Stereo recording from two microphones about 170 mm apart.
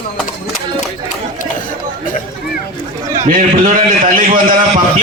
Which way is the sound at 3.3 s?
55° right (ahead or behind).